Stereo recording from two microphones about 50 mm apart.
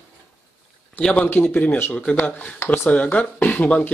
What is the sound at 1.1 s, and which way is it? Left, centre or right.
Speech, left.